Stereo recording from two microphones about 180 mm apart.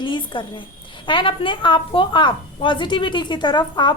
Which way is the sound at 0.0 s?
25° left (ahead or behind).